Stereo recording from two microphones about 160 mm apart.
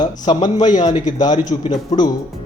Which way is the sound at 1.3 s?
45° left (ahead or behind).